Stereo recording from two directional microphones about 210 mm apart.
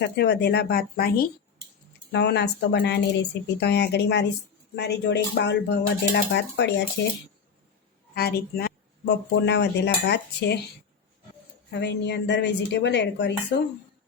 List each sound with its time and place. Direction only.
0.0 s speech: 55° left (ahead or behind)
8.1 s speech: 50° left (ahead or behind)
11.7 s speech: 55° left (ahead or behind)